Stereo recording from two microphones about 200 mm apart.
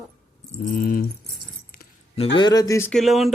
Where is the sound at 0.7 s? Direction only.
50° left (ahead or behind).